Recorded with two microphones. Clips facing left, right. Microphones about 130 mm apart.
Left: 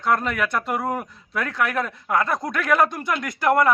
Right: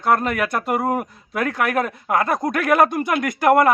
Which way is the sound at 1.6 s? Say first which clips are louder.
Right 1 dB; 55° right (ahead or behind).